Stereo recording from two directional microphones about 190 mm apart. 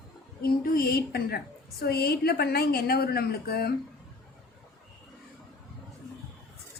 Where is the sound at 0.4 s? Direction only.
50° left (ahead or behind).